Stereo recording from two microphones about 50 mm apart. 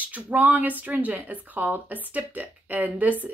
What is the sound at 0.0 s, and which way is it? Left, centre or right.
Speech, right.